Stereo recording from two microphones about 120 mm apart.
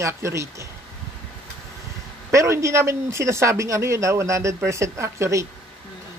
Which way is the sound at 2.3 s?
25° right (ahead or behind).